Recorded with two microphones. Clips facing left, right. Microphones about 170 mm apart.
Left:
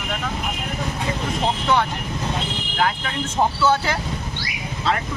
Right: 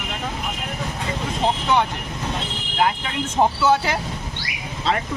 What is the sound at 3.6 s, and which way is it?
Speech, 15° right (ahead or behind).